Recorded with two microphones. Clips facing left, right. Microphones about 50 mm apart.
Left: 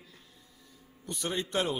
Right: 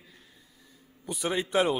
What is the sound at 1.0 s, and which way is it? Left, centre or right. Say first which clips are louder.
Speech: right 4 dB; centre.